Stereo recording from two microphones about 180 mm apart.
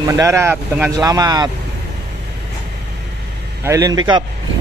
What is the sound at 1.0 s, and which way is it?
Speech, 20° right (ahead or behind).